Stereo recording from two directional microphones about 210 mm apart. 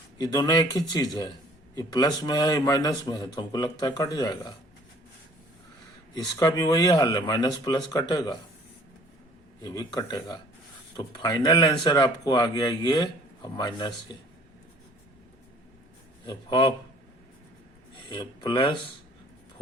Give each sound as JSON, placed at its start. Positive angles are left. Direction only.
{"t": 0.2, "sound": "a man's voice", "side_deg": 20}
{"t": 6.1, "sound": "a man's voice", "side_deg": 15}
{"t": 9.6, "sound": "a man's voice", "side_deg": 15}
{"t": 16.2, "sound": "speech", "side_deg": 20}
{"t": 18.1, "sound": "speech", "side_deg": 20}